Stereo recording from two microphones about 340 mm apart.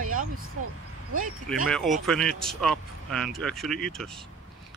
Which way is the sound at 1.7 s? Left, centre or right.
Centre.